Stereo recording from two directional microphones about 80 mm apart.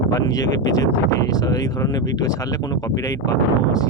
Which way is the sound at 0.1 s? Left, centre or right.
Left.